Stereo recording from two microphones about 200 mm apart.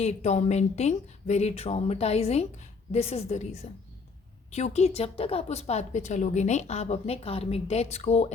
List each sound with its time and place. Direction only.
0.0 s a woman's voice: 35° left (ahead or behind)